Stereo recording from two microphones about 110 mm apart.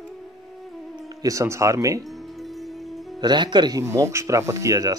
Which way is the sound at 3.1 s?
40° right (ahead or behind).